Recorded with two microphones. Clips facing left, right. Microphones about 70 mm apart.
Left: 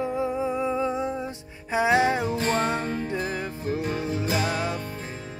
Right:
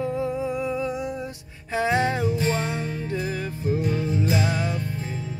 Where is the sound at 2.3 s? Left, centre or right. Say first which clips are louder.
Left 1 dB; left.